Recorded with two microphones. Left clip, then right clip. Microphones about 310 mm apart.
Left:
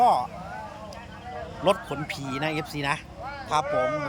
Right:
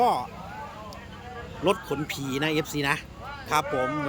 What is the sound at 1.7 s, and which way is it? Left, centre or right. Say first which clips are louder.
Speech: left 1 dB; centre.